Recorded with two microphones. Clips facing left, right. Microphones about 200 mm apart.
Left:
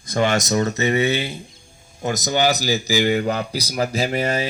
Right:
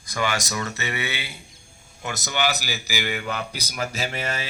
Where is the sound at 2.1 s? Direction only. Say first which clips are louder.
Left 6 dB; 20° left (ahead or behind).